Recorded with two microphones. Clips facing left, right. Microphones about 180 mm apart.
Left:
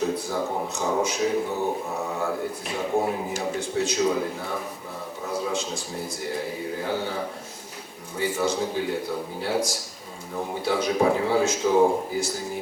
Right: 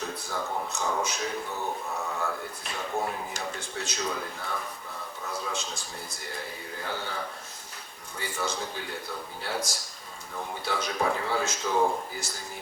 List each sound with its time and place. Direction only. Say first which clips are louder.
0.3 s speech: left 5 dB; 25° left (ahead or behind)
1.0 s speech: left 8 dB; 10° left (ahead or behind)
1.5 s speech: left 6 dB; 25° left (ahead or behind); by 12.5 s 5° left (ahead or behind)